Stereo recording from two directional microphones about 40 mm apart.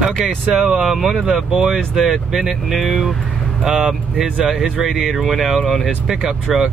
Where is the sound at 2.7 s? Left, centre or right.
Centre.